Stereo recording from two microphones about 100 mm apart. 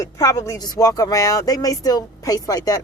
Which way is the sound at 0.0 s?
35° left (ahead or behind).